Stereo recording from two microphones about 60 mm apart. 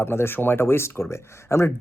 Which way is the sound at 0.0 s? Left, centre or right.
Left.